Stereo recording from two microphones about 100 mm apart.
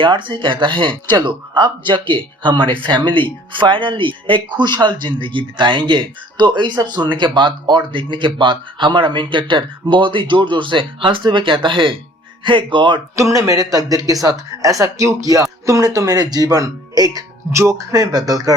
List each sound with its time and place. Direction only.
0.0 s speech: 55° right (ahead or behind)
13.1 s speech: 30° right (ahead or behind)